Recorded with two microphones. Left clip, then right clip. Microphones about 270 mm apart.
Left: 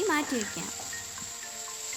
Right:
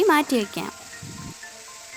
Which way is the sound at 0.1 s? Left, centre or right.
Right.